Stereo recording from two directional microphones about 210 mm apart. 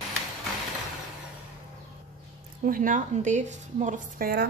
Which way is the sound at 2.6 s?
40° right (ahead or behind).